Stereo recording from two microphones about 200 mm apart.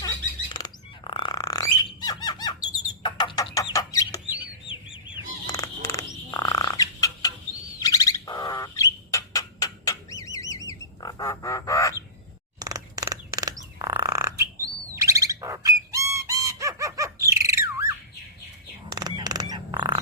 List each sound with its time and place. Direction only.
0.0 s a sound: 20° left (ahead or behind)
3.0 s chicken: 20° left (ahead or behind)
5.1 s frog: 15° left (ahead or behind)
7.8 s bird: 15° left (ahead or behind)
12.5 s frog: 20° right (ahead or behind)
18.9 s a sound: 20° right (ahead or behind)